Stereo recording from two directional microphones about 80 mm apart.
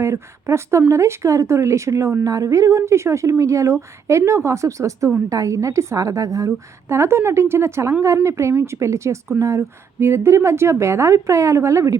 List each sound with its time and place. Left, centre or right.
0.0 s speech: right